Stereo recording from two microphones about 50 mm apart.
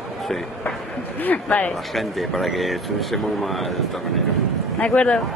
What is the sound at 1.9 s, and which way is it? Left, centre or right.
Speech, centre.